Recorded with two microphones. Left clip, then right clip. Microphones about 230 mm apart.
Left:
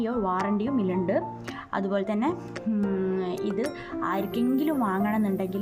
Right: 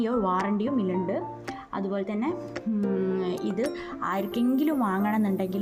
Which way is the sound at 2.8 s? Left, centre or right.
Centre.